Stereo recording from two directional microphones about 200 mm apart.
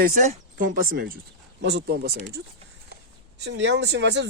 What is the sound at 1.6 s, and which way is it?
Speech, 55° right (ahead or behind).